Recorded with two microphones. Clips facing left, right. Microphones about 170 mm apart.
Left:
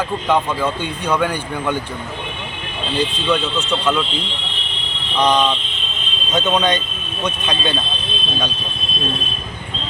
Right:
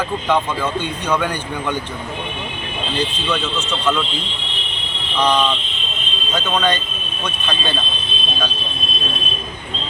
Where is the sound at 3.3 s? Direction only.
10° left (ahead or behind).